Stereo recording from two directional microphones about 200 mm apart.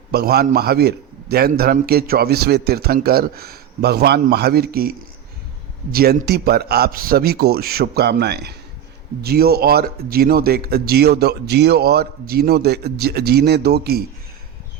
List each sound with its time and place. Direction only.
0.1 s a man's voice: 50° right (ahead or behind)